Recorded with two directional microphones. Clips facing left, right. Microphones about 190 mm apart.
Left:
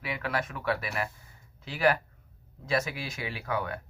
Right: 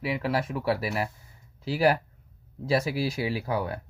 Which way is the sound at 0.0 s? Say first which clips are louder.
Right 5 dB; 30° right (ahead or behind).